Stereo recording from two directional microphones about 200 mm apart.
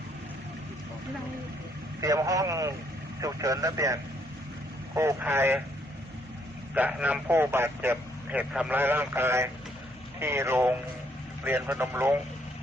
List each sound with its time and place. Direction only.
2.0 s a man's voice: 15° right (ahead or behind)
6.7 s a man's voice: 10° right (ahead or behind)